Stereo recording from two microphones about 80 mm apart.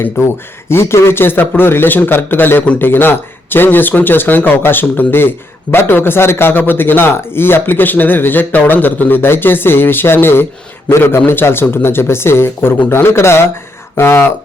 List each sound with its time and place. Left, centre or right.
0.2 s a man's voice: left